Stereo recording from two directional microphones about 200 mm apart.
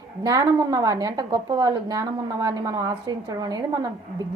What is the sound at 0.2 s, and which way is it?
A woman's voice, 15° right (ahead or behind).